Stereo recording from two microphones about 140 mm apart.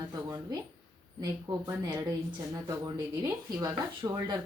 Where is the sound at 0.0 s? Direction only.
25° right (ahead or behind).